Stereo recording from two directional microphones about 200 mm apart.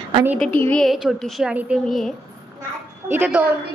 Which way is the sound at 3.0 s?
10° right (ahead or behind).